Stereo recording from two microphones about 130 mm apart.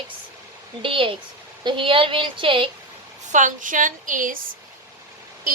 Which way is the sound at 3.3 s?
85° right.